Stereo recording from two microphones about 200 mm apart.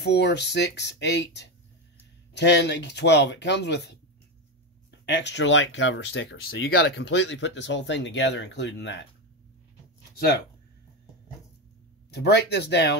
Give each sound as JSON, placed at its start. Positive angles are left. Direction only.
{"t": 0.0, "sound": "speech", "side_deg": 55}
{"t": 5.0, "sound": "speech", "side_deg": 60}
{"t": 12.1, "sound": "speech", "side_deg": 55}